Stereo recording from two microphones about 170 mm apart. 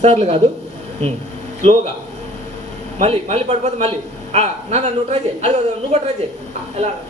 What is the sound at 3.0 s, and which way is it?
Speech, 35° right (ahead or behind).